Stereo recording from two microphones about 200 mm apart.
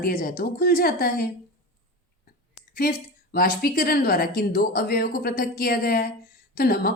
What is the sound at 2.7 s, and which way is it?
A woman's voice, 45° left (ahead or behind).